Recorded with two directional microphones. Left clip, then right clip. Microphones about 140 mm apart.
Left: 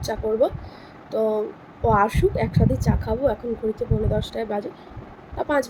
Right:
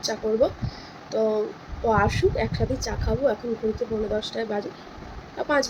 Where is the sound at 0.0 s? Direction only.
15° left (ahead or behind).